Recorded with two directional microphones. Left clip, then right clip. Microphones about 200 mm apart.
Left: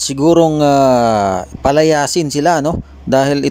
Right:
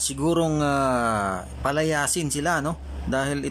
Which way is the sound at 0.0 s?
30° left (ahead or behind).